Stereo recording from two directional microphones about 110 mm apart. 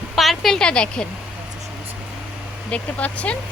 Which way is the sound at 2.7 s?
10° left (ahead or behind).